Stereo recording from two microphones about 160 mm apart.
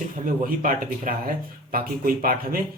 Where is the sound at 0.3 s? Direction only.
60° right (ahead or behind).